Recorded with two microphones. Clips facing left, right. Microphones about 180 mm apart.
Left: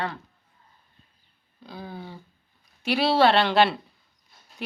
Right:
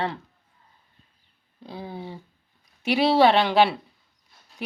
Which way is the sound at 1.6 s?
25° right (ahead or behind).